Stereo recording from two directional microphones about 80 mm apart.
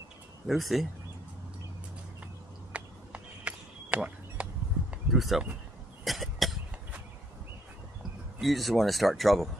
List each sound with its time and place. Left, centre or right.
0.5 s speech: centre
2.7 s a sound: centre
5.1 s speech: centre
6.0 s cough: centre
8.4 s speech: centre